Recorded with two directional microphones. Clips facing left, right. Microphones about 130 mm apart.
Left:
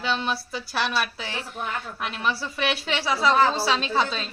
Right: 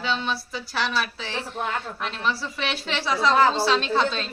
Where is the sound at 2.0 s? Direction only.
10° left (ahead or behind).